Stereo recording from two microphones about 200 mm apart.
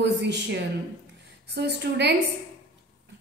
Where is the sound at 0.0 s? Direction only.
60° right (ahead or behind).